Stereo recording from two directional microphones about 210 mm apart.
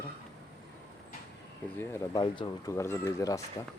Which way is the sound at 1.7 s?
15° left (ahead or behind).